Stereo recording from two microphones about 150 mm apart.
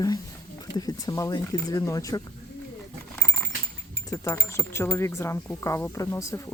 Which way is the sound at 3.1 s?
10° left (ahead or behind).